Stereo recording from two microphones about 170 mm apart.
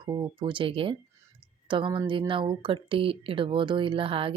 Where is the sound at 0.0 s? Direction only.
25° right (ahead or behind).